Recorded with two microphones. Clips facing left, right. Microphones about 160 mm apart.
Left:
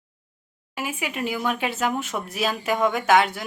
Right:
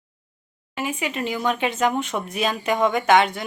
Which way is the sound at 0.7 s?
10° left (ahead or behind).